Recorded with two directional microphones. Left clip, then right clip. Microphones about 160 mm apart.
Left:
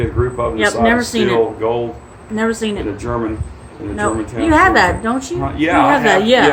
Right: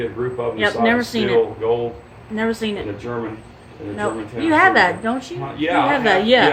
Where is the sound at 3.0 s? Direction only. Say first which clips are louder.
Left 6 dB; 60° left (ahead or behind).